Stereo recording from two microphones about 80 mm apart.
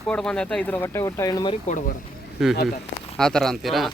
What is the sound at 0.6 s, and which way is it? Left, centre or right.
Speech, left.